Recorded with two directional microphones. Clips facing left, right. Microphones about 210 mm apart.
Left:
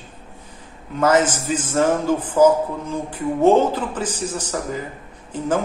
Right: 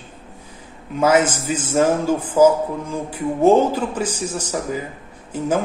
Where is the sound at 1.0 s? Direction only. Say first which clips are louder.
Right 1 dB; 10° right (ahead or behind).